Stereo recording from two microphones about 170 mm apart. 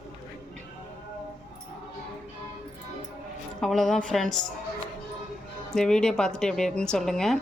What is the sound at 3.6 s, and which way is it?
Speech, centre (ahead or behind).